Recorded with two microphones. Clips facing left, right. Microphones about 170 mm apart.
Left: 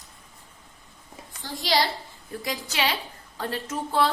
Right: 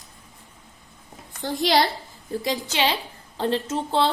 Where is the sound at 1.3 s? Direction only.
60° right (ahead or behind).